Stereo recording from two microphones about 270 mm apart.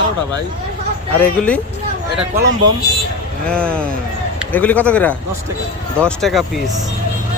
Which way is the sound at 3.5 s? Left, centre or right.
Centre.